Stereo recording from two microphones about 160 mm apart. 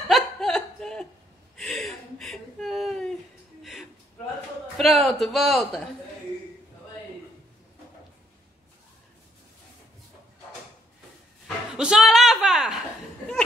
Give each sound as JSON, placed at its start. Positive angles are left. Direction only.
{"t": 0.1, "sound": "chuckle", "side_deg": 0}
{"t": 1.6, "sound": "gasp", "side_deg": 0}
{"t": 4.7, "sound": "a man's voice", "side_deg": 0}
{"t": 11.4, "sound": "speech", "side_deg": -5}